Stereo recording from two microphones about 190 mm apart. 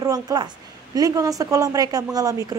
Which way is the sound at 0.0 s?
20° right (ahead or behind).